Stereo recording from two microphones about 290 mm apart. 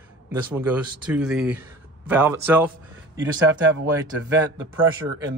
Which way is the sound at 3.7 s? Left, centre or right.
Right.